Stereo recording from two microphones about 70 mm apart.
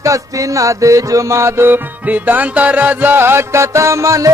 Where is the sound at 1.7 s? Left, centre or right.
Right.